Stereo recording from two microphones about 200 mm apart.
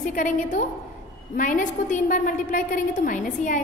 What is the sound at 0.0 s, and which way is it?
A woman's voice, 40° left (ahead or behind).